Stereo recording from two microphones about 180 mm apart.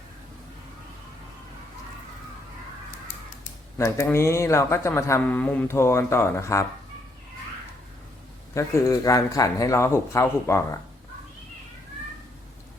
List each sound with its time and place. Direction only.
3.8 s a man's voice: 15° left (ahead or behind)
8.5 s a man's voice: 15° left (ahead or behind)